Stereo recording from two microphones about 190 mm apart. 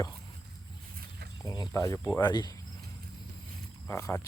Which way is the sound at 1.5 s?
20° left (ahead or behind).